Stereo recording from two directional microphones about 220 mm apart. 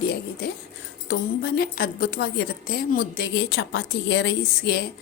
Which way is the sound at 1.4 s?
45° left (ahead or behind).